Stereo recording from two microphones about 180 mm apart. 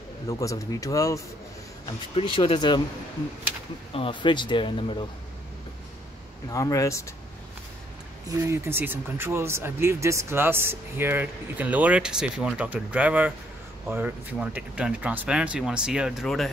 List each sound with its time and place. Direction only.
0.3 s speech: 20° left (ahead or behind)
2.1 s speech: 30° left (ahead or behind)
3.9 s speech: 30° left (ahead or behind)
6.5 s speech: 20° left (ahead or behind)
8.3 s speech: 15° right (ahead or behind); by 16.4 s centre (ahead or behind)